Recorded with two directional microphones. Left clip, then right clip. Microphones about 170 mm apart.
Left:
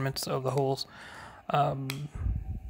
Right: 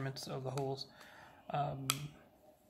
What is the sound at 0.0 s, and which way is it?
Speech, 45° left (ahead or behind).